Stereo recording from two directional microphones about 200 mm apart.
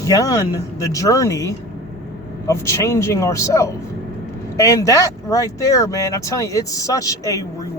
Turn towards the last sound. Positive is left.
turn(degrees=15)  # may be behind; listen again after turning